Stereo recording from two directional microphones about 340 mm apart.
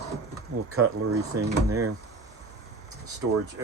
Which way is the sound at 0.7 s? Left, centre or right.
Right.